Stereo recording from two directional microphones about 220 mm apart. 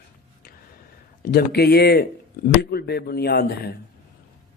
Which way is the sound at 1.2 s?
45° left (ahead or behind).